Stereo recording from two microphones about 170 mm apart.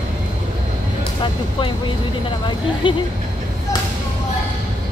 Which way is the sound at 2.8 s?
30° left (ahead or behind).